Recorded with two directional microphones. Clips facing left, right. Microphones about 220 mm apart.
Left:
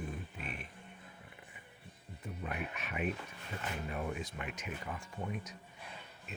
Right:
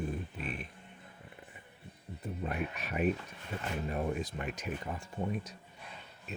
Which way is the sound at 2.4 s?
35° right (ahead or behind).